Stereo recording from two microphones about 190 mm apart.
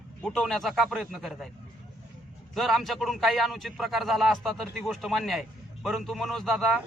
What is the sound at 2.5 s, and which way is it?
A man's voice, centre (ahead or behind).